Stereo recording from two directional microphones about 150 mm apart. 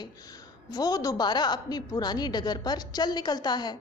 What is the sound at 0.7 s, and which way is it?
A woman's voice, 25° left (ahead or behind).